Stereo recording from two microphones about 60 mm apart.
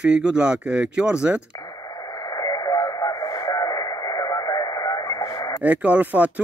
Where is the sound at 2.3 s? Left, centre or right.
Left.